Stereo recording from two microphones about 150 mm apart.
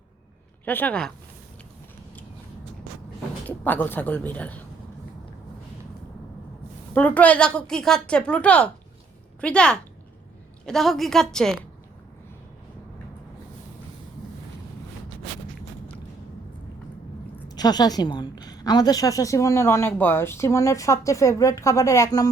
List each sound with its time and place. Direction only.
0.6 s a woman's voice: 10° left (ahead or behind)
3.4 s a woman's voice: 10° left (ahead or behind)
6.9 s a woman's voice: 10° left (ahead or behind)
17.5 s a woman's voice: 25° left (ahead or behind)